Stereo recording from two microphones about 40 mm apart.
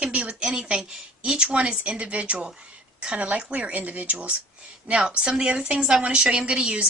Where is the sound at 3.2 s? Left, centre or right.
Right.